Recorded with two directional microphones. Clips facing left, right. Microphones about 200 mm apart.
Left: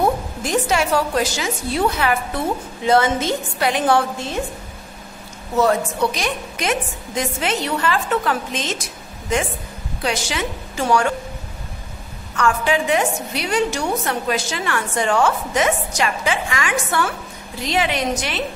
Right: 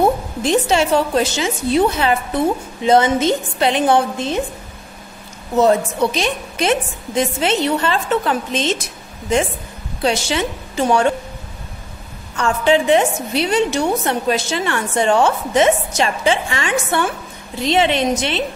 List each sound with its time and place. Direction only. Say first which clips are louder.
0.4 s a woman's voice: right 5 dB; 25° right (ahead or behind)
5.6 s a woman's voice: right 3 dB; 20° right (ahead or behind)
10.0 s a woman's voice: right 5 dB; 25° right (ahead or behind)
12.4 s a woman's voice: right 3 dB; 25° right (ahead or behind)